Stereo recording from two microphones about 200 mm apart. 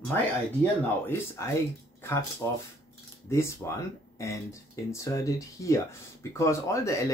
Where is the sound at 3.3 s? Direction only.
15° left (ahead or behind).